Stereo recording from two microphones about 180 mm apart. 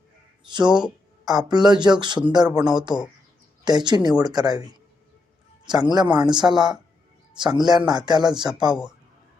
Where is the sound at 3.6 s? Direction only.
25° right (ahead or behind).